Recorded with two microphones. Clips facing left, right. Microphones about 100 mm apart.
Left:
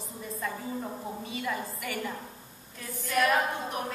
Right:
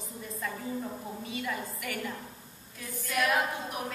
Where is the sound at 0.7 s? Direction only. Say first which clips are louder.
Left 1 dB; 20° left (ahead or behind).